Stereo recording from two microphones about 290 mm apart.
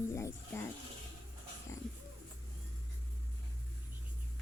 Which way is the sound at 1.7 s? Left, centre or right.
Centre.